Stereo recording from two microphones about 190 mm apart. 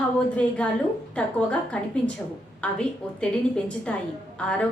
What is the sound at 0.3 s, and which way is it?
A woman's voice, 5° left (ahead or behind).